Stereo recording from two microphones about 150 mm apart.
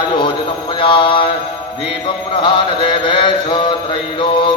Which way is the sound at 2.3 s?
35° left (ahead or behind).